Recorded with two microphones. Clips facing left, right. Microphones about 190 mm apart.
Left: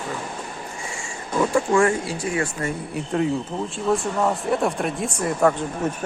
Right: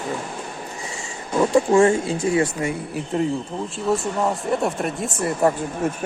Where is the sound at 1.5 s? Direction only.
25° right (ahead or behind).